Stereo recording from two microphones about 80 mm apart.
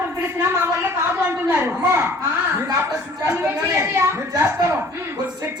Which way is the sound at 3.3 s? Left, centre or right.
Right.